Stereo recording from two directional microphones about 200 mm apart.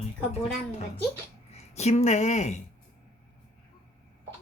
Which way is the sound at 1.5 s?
35° left (ahead or behind).